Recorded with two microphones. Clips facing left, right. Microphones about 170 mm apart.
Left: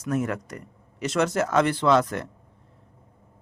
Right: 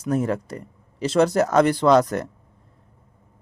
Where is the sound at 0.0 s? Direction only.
30° right (ahead or behind).